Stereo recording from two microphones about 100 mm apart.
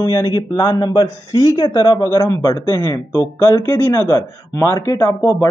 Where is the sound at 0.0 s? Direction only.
40° left (ahead or behind).